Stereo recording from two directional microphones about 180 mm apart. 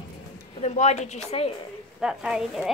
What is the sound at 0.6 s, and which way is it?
Speech, 40° left (ahead or behind).